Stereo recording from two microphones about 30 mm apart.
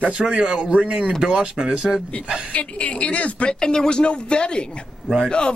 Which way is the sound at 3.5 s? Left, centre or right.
Left.